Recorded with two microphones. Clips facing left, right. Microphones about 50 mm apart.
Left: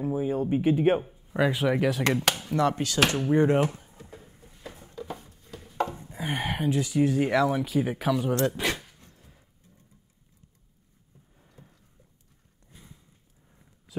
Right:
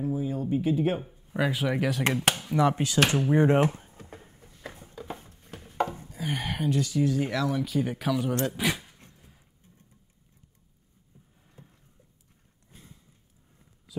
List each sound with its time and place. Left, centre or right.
0.0 s speech: left
1.0 s speech: centre
2.5 s speech: centre
3.4 s a sound: right
5.9 s chopping: left
6.4 s speech: centre
7.0 s speech: left
7.6 s speech: centre
9.2 s music: centre
11.6 s a sound: right